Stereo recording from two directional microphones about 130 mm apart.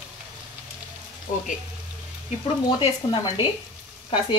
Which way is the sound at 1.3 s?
90° left.